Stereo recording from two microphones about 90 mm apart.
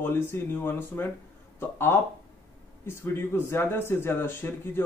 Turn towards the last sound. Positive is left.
turn(degrees=25)  # may be behind; listen again after turning